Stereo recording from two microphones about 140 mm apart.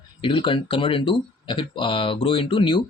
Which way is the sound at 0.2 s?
40° left (ahead or behind).